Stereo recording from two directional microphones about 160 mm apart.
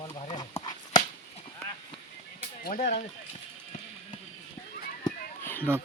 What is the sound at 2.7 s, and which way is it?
Speech, 40° left (ahead or behind).